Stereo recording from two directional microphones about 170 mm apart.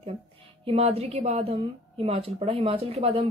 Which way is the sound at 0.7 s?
35° right (ahead or behind).